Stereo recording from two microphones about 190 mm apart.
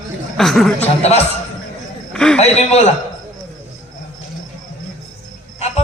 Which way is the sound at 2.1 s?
5° left (ahead or behind).